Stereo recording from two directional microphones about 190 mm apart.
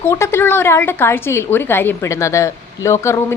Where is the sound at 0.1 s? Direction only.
15° left (ahead or behind).